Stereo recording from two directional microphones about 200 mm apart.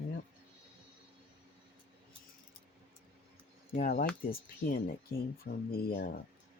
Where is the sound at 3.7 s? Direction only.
45° left (ahead or behind).